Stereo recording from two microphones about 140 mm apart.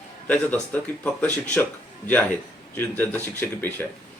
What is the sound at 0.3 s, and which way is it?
Speech, 10° left (ahead or behind).